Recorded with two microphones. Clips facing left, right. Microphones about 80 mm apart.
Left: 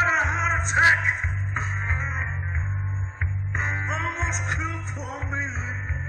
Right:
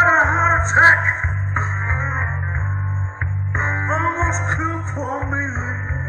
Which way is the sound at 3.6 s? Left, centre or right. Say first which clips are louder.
Right 8 dB; right.